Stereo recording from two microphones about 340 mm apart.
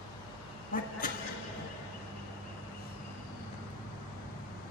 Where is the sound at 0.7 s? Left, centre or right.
Left.